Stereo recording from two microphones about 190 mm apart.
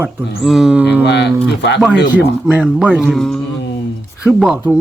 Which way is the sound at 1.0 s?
65° left (ahead or behind).